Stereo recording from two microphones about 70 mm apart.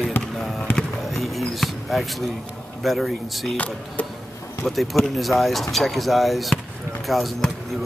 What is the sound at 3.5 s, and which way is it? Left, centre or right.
Speech, centre.